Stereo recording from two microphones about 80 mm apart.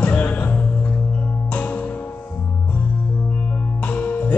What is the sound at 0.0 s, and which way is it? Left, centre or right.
Music, centre.